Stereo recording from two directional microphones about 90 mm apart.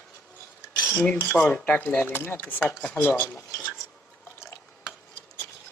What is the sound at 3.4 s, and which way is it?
Stir, 30° left (ahead or behind).